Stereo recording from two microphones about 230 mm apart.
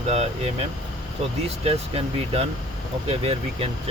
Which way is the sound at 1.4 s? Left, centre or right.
Right.